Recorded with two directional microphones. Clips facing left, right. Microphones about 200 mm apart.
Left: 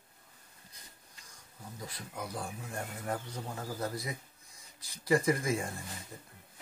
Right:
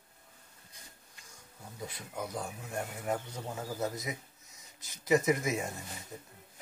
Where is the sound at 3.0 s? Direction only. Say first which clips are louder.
Right 1 dB; 10° right (ahead or behind).